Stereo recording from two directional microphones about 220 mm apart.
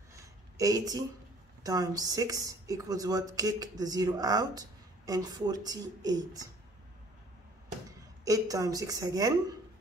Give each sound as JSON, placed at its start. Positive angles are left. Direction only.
{"t": 0.1, "sound": "a sound", "side_deg": -15}
{"t": 1.6, "sound": "speech", "side_deg": -15}
{"t": 8.3, "sound": "speech", "side_deg": -15}